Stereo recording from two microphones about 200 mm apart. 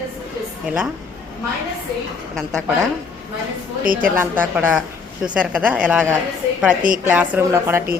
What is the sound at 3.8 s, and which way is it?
Speech, 45° right (ahead or behind).